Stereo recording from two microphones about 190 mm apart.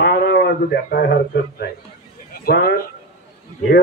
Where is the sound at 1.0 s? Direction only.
65° left (ahead or behind).